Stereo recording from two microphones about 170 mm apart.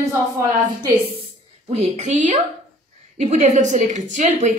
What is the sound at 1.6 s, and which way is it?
Speech, 30° right (ahead or behind).